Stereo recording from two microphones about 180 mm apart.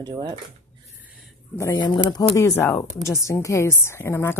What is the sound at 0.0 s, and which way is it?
Speech, 25° right (ahead or behind).